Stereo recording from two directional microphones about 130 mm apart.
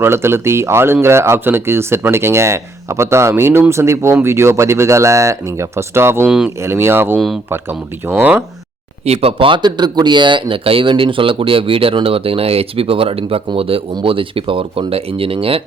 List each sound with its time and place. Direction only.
0.0 s speech: 20° right (ahead or behind)
6.2 s speech: 5° right (ahead or behind)
6.6 s speech: 20° right (ahead or behind)
9.0 s speech: 50° right (ahead or behind)